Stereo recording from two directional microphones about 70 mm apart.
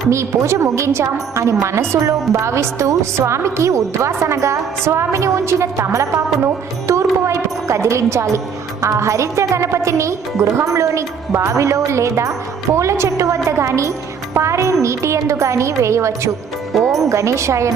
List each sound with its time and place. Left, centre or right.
0.1 s a woman's voice: right
16.7 s speech: centre
17.1 s a woman's voice: right